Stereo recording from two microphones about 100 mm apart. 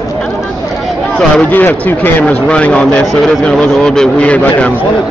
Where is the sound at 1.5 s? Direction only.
20° left (ahead or behind).